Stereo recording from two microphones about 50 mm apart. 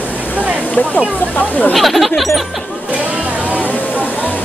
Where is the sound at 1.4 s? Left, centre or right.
Left.